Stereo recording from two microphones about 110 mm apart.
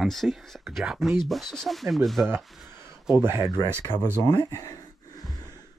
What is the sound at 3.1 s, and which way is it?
Speech, 20° right (ahead or behind).